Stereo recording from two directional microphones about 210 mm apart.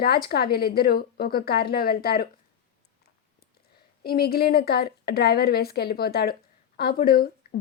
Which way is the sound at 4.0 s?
45° left (ahead or behind).